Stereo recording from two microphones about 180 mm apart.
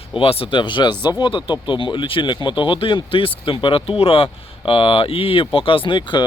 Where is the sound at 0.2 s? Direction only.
30° left (ahead or behind).